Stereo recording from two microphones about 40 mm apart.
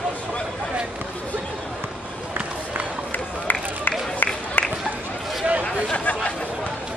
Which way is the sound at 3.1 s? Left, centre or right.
Left.